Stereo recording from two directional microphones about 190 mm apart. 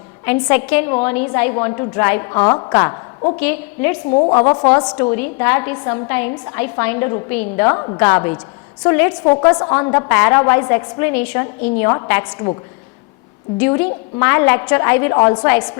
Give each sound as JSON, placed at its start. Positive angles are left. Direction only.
{"t": 0.3, "sound": "a woman's voice", "side_deg": 10}
{"t": 4.1, "sound": "a woman's voice", "side_deg": 30}
{"t": 4.4, "sound": "a woman's voice", "side_deg": 15}
{"t": 5.1, "sound": "a woman's voice", "side_deg": 10}
{"t": 13.6, "sound": "a woman's voice", "side_deg": 10}